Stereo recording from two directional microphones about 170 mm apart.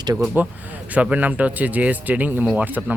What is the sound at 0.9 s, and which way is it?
Speech, 10° right (ahead or behind).